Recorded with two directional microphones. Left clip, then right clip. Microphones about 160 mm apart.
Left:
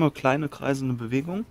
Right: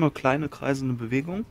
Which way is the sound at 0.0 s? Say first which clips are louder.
Left 1 dB; 25° left (ahead or behind).